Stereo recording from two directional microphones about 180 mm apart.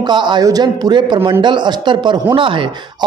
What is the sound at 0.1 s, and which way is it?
A man's voice, 25° right (ahead or behind).